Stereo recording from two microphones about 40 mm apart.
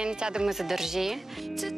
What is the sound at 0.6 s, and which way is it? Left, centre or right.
Speech, centre.